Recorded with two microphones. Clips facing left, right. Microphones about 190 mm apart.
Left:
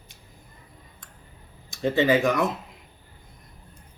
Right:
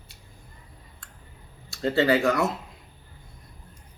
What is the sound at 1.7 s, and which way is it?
Speech, 15° left (ahead or behind).